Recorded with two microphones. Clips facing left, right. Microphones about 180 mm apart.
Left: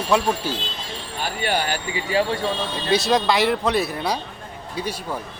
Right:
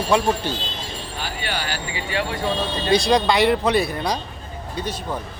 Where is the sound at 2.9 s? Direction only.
5° left (ahead or behind).